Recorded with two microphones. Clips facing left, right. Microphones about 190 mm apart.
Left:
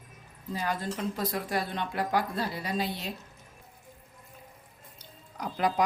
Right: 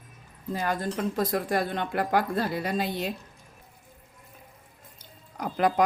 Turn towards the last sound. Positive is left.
turn(degrees=-55)  # may be behind; listen again after turning